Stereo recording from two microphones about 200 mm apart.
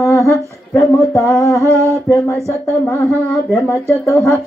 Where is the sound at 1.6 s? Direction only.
15° right (ahead or behind).